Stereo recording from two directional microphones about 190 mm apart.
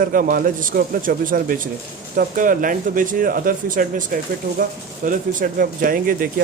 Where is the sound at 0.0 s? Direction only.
45° right (ahead or behind).